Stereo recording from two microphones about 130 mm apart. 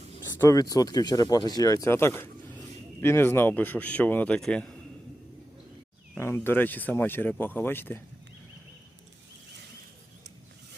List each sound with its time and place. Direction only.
0.3 s speech: 25° left (ahead or behind); by 4.8 s 5° left (ahead or behind)
6.1 s speech: 20° left (ahead or behind)